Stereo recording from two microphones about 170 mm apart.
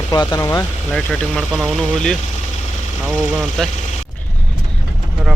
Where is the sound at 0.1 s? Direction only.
25° left (ahead or behind).